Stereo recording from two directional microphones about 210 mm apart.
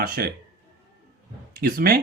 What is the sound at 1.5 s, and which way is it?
Speech, 45° right (ahead or behind).